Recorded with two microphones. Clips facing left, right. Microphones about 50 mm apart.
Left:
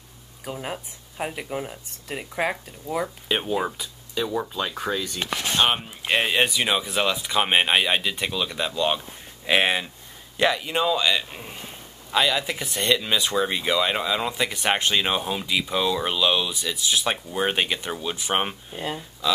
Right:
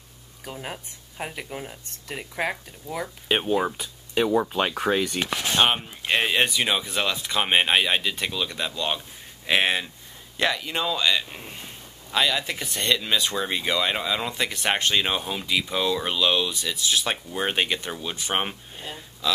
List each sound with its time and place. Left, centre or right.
0.5 s speech: centre
3.3 s speech: centre
3.7 s speech: right
5.7 s speech: centre